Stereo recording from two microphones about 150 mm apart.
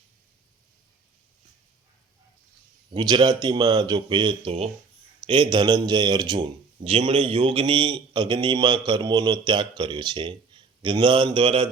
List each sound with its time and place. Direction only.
2.9 s a man's voice: 30° right (ahead or behind)